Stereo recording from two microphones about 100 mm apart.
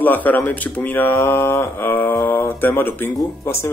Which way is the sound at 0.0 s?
15° left (ahead or behind).